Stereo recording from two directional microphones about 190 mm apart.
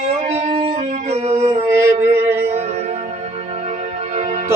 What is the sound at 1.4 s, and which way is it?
Music, 15° right (ahead or behind).